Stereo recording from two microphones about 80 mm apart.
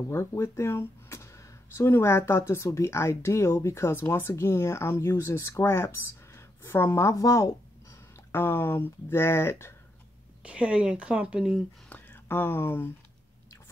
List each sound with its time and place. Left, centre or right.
0.1 s speech: left
8.3 s speech: left
10.4 s speech: centre
11.9 s speech: left